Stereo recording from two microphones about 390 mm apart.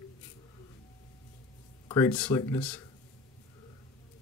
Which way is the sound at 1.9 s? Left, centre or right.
Centre.